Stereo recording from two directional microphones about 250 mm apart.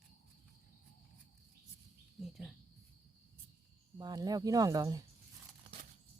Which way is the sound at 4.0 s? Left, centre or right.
Centre.